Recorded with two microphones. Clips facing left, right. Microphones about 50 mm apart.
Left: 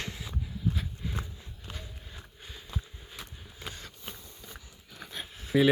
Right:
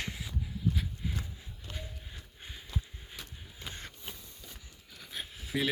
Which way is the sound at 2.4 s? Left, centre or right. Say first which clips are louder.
Right 1 dB; centre.